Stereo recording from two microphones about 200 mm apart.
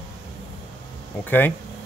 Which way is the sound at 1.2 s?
10° left (ahead or behind).